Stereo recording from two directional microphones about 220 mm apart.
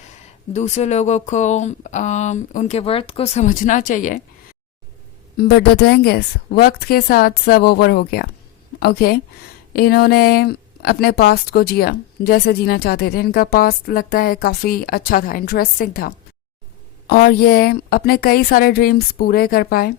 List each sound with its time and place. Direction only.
0.5 s speech: 30° left (ahead or behind)
5.4 s speech: 45° left (ahead or behind)